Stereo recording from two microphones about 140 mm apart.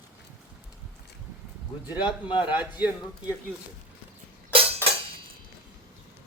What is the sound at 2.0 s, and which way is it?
Speech, 35° left (ahead or behind).